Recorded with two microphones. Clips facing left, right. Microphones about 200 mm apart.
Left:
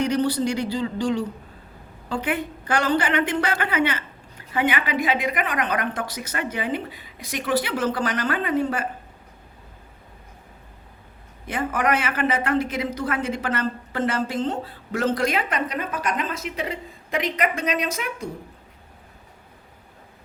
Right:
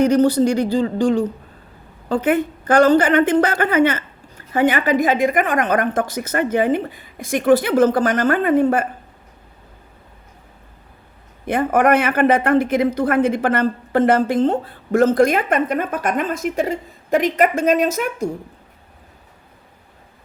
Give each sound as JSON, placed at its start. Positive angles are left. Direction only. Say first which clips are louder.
{"t": 0.0, "sound": "speech", "louder": "right 8 dB", "side_deg": -45}
{"t": 11.4, "sound": "speech", "louder": "right 8 dB", "side_deg": -55}